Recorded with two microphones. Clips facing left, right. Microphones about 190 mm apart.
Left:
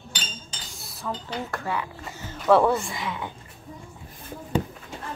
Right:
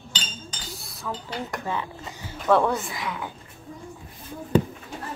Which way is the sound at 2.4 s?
Centre (ahead or behind).